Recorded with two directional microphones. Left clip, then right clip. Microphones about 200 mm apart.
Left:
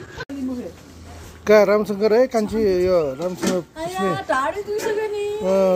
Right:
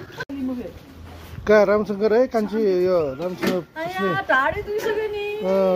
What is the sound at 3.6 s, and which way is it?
A woman's voice, centre (ahead or behind).